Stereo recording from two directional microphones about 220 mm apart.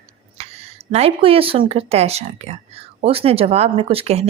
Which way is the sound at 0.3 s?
30° right (ahead or behind).